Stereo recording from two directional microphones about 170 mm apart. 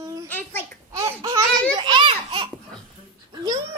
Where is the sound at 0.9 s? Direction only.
20° right (ahead or behind).